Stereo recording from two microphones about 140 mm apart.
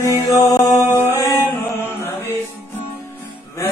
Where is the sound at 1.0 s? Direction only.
20° left (ahead or behind).